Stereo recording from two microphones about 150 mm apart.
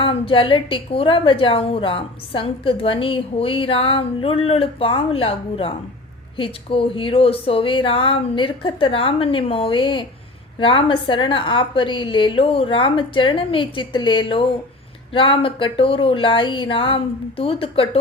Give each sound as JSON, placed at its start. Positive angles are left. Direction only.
{"t": 0.0, "sound": "a woman's voice", "side_deg": 35}